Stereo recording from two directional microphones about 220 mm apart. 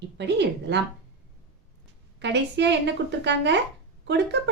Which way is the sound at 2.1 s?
50° right (ahead or behind).